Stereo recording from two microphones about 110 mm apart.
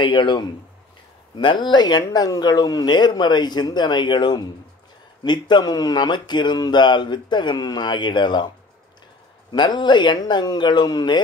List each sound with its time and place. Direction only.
0.0 s speech: 50° left (ahead or behind)
9.5 s speech: 45° left (ahead or behind)